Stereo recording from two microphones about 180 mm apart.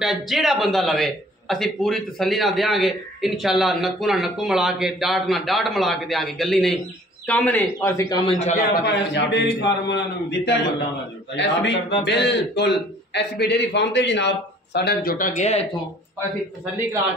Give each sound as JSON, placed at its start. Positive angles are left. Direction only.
{"t": 0.0, "sound": "a man's voice", "side_deg": 0}
{"t": 8.1, "sound": "a man's voice", "side_deg": 25}
{"t": 8.5, "sound": "a man's voice", "side_deg": 45}
{"t": 8.8, "sound": "a man's voice", "side_deg": 75}